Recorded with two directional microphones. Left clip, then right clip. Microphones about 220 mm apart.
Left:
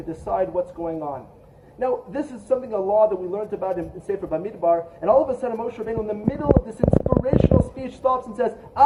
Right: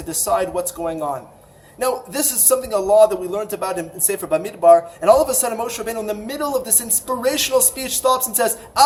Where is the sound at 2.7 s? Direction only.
15° right (ahead or behind).